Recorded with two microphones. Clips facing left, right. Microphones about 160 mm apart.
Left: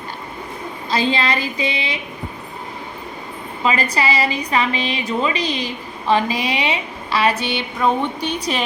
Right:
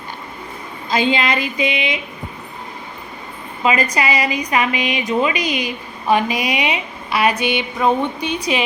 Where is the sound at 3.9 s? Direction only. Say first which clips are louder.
Even; 15° right (ahead or behind).